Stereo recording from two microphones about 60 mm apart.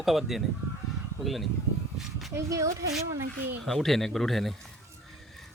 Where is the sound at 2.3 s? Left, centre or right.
Right.